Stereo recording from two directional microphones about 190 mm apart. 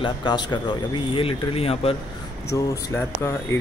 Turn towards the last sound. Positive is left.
turn(degrees=15)  # may be behind; listen again after turning